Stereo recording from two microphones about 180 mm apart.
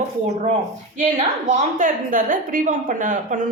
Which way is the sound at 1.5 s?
45° right (ahead or behind).